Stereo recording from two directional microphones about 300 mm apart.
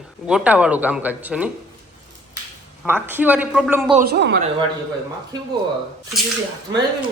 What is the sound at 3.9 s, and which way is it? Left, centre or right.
Speech, right.